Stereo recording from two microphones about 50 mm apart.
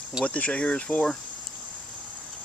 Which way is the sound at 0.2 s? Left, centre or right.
Left.